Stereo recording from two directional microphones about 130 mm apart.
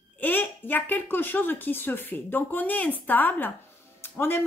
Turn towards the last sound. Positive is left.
turn(degrees=15)  # may be behind; listen again after turning